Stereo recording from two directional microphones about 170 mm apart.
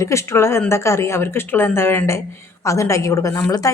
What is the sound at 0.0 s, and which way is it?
A woman's voice, 15° left (ahead or behind).